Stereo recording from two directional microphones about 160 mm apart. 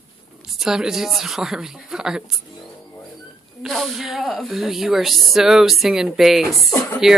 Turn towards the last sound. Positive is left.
turn(degrees=-5)  # may be behind; listen again after turning